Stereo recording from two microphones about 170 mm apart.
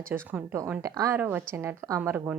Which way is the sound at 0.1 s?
10° right (ahead or behind).